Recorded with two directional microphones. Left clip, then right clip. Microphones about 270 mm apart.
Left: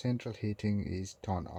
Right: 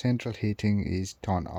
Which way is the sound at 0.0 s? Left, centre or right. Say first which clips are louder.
Right 6 dB; right.